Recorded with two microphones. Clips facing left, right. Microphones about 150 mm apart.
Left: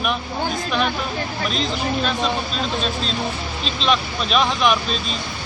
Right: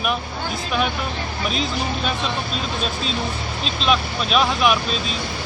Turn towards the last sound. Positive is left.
turn(degrees=-5)  # may be behind; listen again after turning